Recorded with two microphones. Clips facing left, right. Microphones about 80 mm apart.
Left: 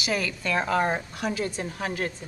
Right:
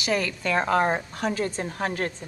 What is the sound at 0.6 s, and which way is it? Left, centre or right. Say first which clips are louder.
A woman's voice: right 2 dB; right.